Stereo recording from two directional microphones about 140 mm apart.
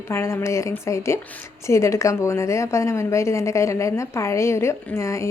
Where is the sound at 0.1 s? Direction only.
20° left (ahead or behind).